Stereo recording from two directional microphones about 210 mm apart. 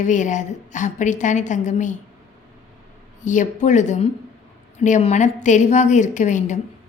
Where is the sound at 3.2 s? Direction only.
35° left (ahead or behind).